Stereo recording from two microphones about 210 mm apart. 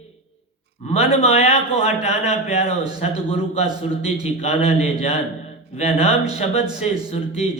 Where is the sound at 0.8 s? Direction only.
30° left (ahead or behind).